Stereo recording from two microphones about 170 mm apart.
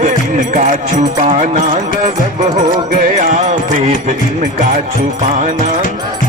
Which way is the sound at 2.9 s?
50° right (ahead or behind).